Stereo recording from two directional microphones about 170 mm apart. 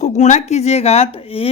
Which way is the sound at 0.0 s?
40° left (ahead or behind).